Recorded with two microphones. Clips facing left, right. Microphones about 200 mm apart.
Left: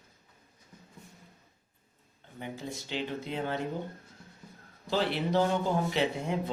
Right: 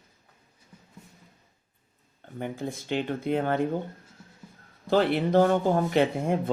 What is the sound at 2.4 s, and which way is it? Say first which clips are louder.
Speech: right 6 dB; 55° right (ahead or behind).